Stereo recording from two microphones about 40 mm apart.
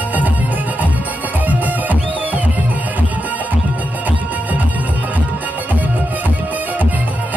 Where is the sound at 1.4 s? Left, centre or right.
Right.